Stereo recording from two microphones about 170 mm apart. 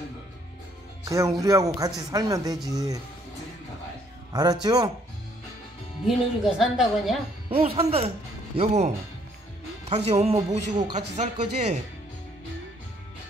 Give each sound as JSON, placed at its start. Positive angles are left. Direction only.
{"t": 1.0, "sound": "a woman's voice", "side_deg": -20}
{"t": 4.3, "sound": "a woman's voice", "side_deg": -25}
{"t": 6.0, "sound": "speech", "side_deg": 0}
{"t": 7.4, "sound": "speech", "side_deg": -35}